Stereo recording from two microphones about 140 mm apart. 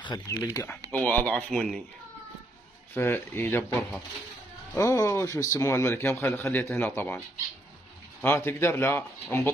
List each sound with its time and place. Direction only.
0.0 s a man's voice: 25° left (ahead or behind)
0.9 s a man's voice: 10° left (ahead or behind)
2.9 s a man's voice: 15° left (ahead or behind)